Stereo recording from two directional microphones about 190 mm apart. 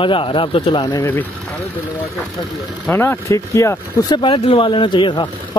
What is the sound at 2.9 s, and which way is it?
Speech, 15° left (ahead or behind).